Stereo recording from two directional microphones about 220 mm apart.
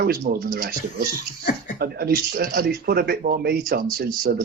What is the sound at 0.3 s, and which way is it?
Speech, 45° right (ahead or behind).